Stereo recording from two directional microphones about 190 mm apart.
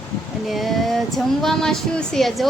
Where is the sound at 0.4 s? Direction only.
Centre (ahead or behind).